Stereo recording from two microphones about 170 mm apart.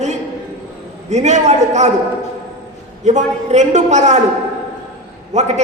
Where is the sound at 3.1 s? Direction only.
45° right (ahead or behind).